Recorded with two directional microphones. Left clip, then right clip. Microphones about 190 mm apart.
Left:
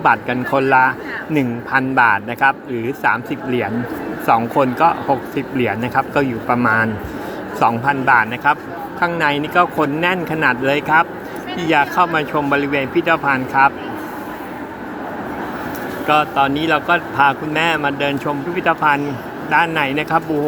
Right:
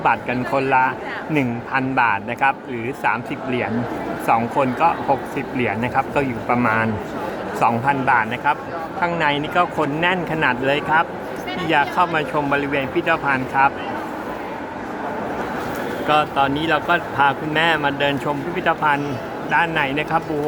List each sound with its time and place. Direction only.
0.0 s speech: 10° left (ahead or behind)
16.0 s speech: 10° left (ahead or behind)